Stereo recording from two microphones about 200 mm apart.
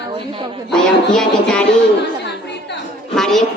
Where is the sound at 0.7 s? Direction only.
5° left (ahead or behind).